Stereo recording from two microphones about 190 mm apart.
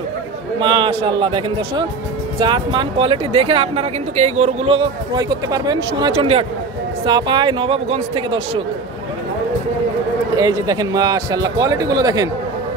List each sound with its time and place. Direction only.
0.6 s speech: 25° right (ahead or behind)
10.3 s speech: 20° right (ahead or behind)